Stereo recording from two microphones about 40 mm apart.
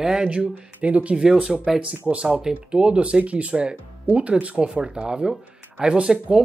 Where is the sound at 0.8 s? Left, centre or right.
Right.